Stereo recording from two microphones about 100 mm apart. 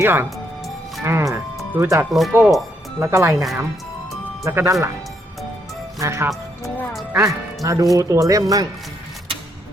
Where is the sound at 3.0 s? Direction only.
25° right (ahead or behind).